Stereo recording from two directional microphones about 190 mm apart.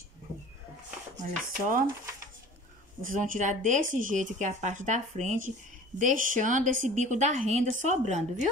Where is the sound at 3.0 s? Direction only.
45° right (ahead or behind).